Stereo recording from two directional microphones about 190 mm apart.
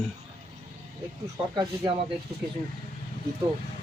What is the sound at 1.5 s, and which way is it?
Speech, 25° right (ahead or behind).